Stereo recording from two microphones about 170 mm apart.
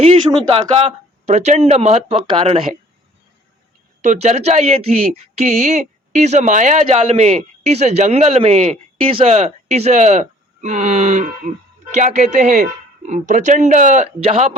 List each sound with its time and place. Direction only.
0.4 s speech: 35° right (ahead or behind)
4.0 s speech: 45° right (ahead or behind)